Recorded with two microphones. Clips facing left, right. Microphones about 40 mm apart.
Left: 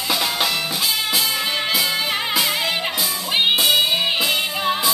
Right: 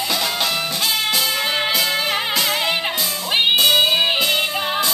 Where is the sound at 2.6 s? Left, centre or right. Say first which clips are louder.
Right 1 dB; centre.